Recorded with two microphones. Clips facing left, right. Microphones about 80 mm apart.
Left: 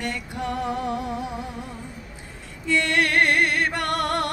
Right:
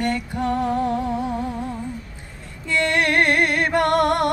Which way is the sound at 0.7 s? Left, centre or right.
Right.